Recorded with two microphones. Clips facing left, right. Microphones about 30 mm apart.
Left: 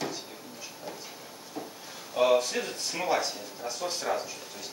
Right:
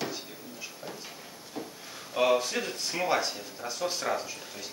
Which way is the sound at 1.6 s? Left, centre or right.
Right.